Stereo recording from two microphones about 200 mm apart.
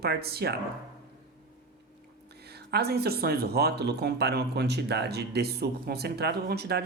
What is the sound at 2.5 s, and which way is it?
Speech, 55° right (ahead or behind).